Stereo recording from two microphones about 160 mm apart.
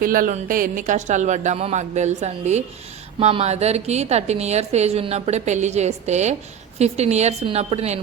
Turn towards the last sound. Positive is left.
turn(degrees=-45)  # may be behind; listen again after turning